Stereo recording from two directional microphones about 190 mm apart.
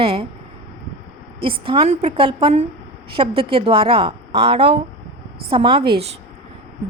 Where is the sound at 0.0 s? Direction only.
30° right (ahead or behind).